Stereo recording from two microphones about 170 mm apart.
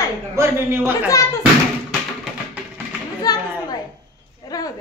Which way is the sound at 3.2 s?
25° left (ahead or behind).